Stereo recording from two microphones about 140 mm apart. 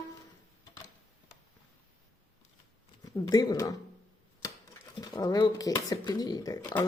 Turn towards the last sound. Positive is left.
turn(degrees=25)  # may be behind; listen again after turning